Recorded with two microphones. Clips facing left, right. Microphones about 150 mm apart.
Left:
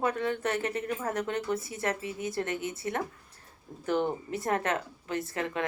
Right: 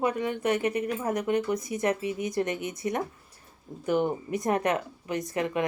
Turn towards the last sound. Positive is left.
turn(degrees=-15)  # may be behind; listen again after turning